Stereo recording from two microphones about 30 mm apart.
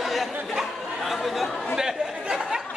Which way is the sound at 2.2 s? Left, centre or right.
Right.